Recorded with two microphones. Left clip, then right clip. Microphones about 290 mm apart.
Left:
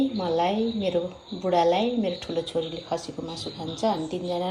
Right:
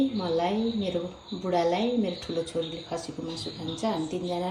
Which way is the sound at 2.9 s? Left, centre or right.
Centre.